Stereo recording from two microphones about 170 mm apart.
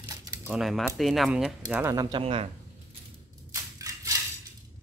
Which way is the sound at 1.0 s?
Centre (ahead or behind).